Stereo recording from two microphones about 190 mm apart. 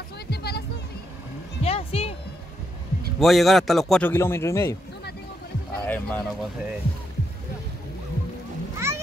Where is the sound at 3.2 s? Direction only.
Centre (ahead or behind).